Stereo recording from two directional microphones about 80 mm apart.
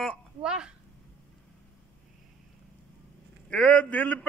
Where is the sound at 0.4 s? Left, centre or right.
Centre.